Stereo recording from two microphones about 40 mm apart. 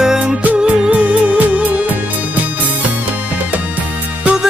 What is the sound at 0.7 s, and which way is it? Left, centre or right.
Music, right.